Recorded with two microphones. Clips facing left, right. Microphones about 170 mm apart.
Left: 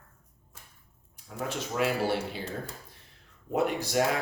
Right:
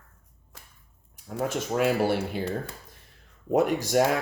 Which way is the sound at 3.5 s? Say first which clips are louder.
Right 5 dB; 45° right (ahead or behind).